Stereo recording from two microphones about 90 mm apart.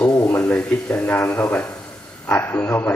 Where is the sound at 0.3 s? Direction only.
20° left (ahead or behind).